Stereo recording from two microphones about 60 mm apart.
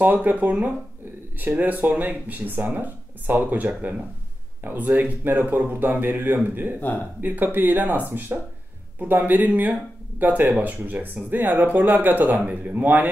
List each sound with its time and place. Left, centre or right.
0.0 s speech: right